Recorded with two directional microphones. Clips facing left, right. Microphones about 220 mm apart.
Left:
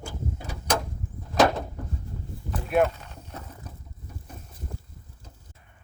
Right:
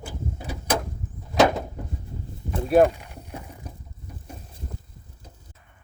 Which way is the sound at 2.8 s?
15° right (ahead or behind).